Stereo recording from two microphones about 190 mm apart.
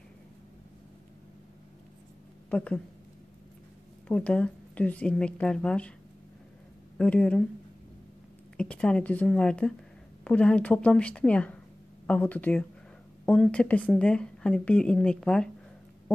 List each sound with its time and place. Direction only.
2.5 s a woman's voice: 5° left (ahead or behind)
4.1 s speech: 5° left (ahead or behind)
7.0 s speech: 5° left (ahead or behind)
8.5 s a woman's voice: 5° left (ahead or behind)